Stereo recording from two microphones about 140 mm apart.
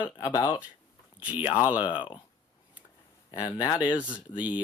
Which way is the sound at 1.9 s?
35° left (ahead or behind).